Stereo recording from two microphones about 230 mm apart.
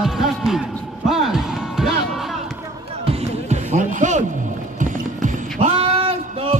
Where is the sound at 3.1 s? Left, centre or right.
Right.